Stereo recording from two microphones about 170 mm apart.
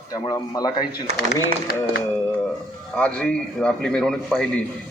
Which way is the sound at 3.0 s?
5° left (ahead or behind).